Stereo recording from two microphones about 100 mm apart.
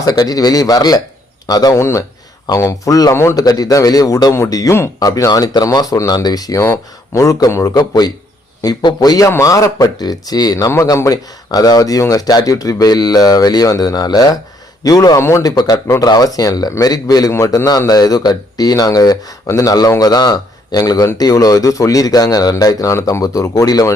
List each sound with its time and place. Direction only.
0.0 s speech: 40° left (ahead or behind)
1.8 s speech: 30° left (ahead or behind)
3.4 s speech: 40° left (ahead or behind)
17.3 s speech: 30° left (ahead or behind)